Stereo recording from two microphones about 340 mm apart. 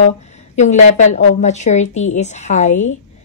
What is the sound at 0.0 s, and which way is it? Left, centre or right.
A woman's voice, centre.